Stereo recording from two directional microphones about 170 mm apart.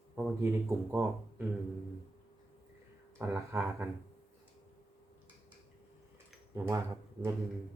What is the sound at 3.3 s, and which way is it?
Speech, 10° right (ahead or behind).